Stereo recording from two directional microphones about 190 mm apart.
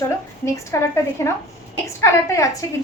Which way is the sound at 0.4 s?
15° left (ahead or behind).